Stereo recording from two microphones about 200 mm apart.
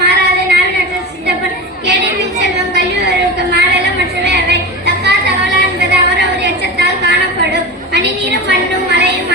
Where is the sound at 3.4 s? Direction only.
55° right (ahead or behind).